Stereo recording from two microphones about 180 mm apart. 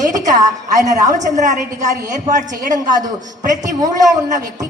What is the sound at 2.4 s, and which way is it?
A woman's voice, 20° right (ahead or behind).